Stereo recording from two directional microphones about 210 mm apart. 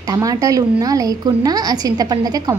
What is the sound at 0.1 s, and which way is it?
A woman's voice, 15° right (ahead or behind).